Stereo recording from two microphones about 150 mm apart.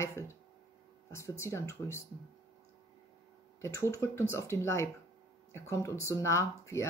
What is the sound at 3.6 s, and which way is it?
Speech, 20° left (ahead or behind).